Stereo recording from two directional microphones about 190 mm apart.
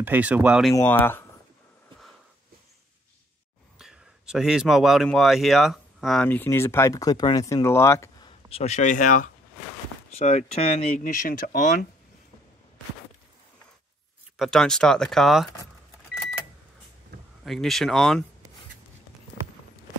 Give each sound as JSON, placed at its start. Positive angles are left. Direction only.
{"t": 0.0, "sound": "speech", "side_deg": -10}
{"t": 0.7, "sound": "speech", "side_deg": 10}
{"t": 3.7, "sound": "speech", "side_deg": -5}
{"t": 8.3, "sound": "speech", "side_deg": 30}
{"t": 14.3, "sound": "speech", "side_deg": 0}
{"t": 17.5, "sound": "speech", "side_deg": 0}